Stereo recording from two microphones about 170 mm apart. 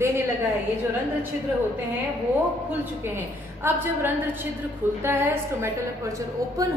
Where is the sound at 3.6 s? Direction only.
10° right (ahead or behind).